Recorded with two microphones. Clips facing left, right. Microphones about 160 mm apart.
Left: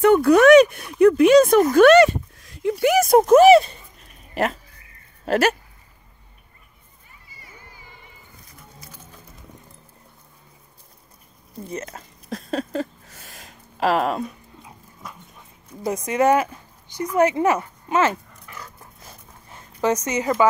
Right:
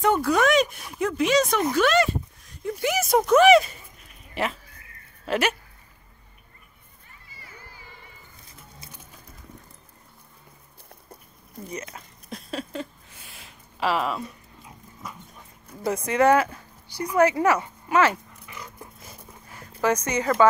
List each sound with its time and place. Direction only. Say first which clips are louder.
0.0 s speech: left 8 dB; 60° left (ahead or behind)
2.6 s a sound: left 8 dB; 70° left (ahead or behind); by 3.7 s 35° left (ahead or behind)
4.4 s speech: left 5 dB; 40° left (ahead or behind)
11.8 s a sound: left 4 dB; 40° left (ahead or behind)
15.8 s speech: left 1 dB; 15° left (ahead or behind)
19.5 s a woman's voice: left 2 dB; 20° left (ahead or behind)